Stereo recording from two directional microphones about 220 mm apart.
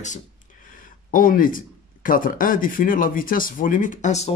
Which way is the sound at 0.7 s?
40° left (ahead or behind).